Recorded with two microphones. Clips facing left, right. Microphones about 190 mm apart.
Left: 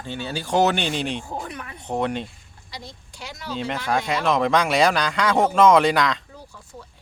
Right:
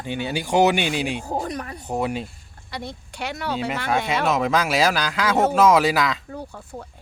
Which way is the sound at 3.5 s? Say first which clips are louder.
Left 1 dB; 5° right (ahead or behind).